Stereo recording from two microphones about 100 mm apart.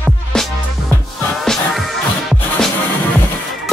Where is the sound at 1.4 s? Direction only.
Centre (ahead or behind).